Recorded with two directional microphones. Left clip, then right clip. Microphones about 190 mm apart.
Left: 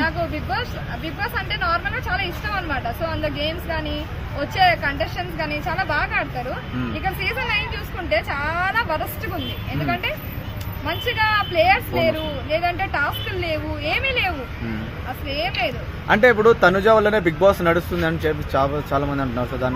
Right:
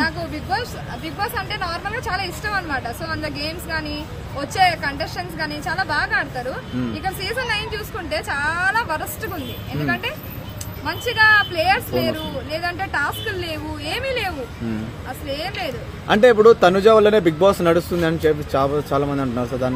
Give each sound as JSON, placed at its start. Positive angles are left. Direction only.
{"t": 0.0, "sound": "a sound", "side_deg": -15}
{"t": 1.2, "sound": "speech", "side_deg": -15}
{"t": 10.9, "sound": "speech", "side_deg": -10}
{"t": 16.1, "sound": "speech", "side_deg": -55}